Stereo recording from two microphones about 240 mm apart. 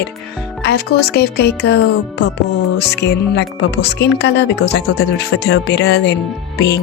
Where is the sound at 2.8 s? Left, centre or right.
Left.